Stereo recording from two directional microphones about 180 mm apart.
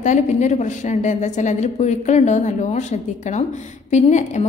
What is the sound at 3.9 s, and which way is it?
Speech, 40° left (ahead or behind).